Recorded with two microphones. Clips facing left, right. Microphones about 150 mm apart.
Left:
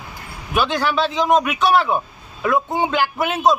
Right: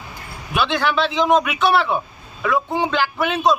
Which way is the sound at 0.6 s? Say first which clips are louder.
Even; 40° left (ahead or behind).